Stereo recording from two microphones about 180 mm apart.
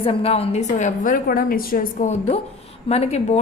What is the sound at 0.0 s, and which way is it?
Speech, 30° left (ahead or behind).